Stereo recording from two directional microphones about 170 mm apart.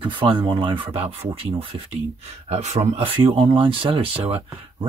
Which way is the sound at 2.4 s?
40° right (ahead or behind).